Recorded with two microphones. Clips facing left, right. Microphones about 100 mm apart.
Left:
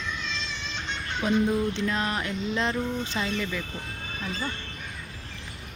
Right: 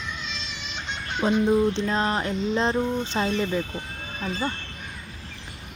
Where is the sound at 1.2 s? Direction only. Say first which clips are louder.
Right 4 dB; 30° right (ahead or behind).